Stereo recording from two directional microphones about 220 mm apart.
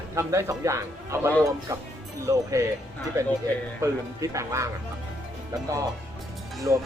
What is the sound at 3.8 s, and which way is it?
Speech, 15° right (ahead or behind).